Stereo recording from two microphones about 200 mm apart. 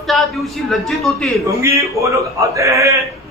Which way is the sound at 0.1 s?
Centre (ahead or behind).